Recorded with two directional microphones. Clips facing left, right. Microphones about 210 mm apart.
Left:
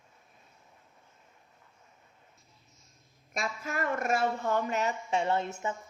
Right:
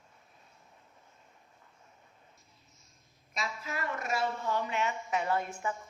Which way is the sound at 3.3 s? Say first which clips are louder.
Left 4 dB; 50° left (ahead or behind).